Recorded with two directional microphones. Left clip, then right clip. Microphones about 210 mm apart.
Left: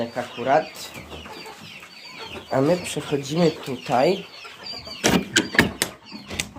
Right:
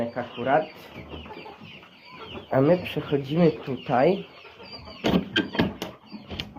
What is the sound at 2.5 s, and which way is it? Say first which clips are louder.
Speech: even; 15° left (ahead or behind).